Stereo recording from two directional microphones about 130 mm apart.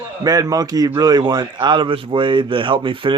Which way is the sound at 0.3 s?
30° right (ahead or behind).